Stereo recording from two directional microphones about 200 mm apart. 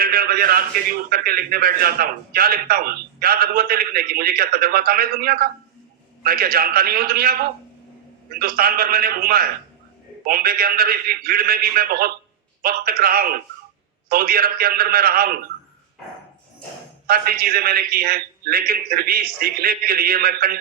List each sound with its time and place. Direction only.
0.0 s a man's voice: 50° right (ahead or behind)
17.1 s a man's voice: 50° right (ahead or behind)